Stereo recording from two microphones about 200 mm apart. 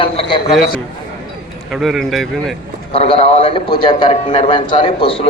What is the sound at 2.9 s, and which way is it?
A man's voice, 30° left (ahead or behind).